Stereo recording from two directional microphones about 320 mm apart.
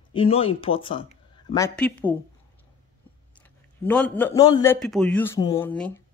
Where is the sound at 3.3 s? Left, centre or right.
Centre.